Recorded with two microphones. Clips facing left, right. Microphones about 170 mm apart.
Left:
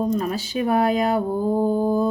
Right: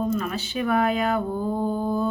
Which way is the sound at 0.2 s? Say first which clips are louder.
Left 3 dB; 35° left (ahead or behind).